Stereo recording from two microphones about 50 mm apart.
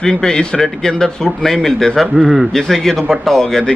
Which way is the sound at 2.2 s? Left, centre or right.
Centre.